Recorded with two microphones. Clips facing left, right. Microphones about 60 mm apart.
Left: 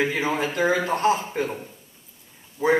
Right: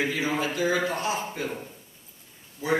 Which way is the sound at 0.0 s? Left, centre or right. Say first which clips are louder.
Left 3 dB; left.